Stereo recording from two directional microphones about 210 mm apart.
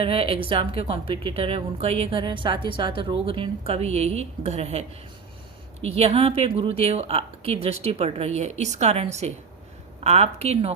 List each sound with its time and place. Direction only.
0.0 s a woman's voice: 25° right (ahead or behind)